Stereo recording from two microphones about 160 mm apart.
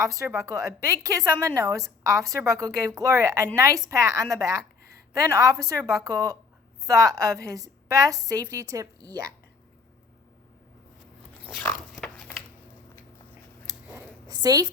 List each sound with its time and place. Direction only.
0.0 s a woman's voice: 20° right (ahead or behind)
11.6 s dog: 10° left (ahead or behind)
14.3 s a woman's voice: 25° right (ahead or behind)